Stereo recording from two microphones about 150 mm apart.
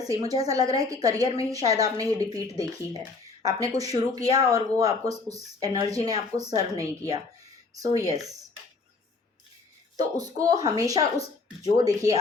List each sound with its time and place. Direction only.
0.0 s speech: 25° right (ahead or behind)
10.0 s speech: 25° right (ahead or behind)